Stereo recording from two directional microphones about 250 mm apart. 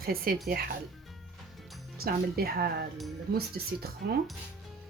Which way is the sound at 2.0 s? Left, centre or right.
Right.